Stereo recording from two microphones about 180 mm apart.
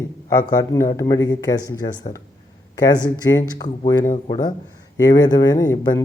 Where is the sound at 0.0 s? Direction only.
20° left (ahead or behind).